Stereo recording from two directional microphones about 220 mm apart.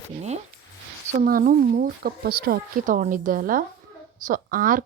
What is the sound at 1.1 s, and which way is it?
Speech, 35° right (ahead or behind).